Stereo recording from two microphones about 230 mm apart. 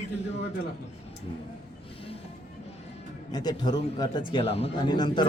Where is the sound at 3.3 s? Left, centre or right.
Centre.